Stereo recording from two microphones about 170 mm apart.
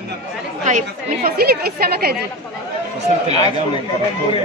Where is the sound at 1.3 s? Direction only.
65° right (ahead or behind).